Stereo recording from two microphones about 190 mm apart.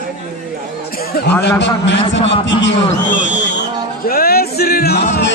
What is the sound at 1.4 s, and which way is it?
A man's voice, 65° left (ahead or behind).